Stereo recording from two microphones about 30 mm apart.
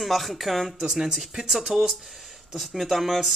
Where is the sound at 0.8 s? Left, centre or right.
Right.